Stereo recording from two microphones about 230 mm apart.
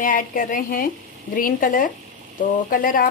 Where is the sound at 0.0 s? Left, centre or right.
Left.